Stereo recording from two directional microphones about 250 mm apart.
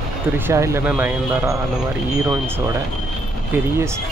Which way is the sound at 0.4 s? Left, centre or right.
Centre.